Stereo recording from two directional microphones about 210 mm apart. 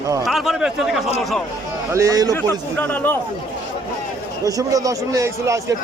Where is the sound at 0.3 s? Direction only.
Centre (ahead or behind).